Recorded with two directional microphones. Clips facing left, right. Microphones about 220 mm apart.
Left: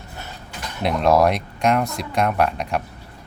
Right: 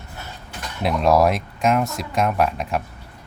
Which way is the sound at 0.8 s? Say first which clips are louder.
Even; centre (ahead or behind).